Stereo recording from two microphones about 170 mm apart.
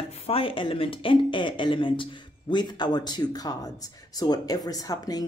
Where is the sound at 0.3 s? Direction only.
30° left (ahead or behind).